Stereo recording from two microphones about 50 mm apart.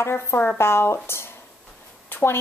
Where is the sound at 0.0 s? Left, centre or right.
Left.